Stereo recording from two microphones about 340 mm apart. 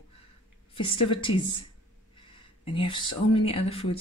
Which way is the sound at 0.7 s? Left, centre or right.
Centre.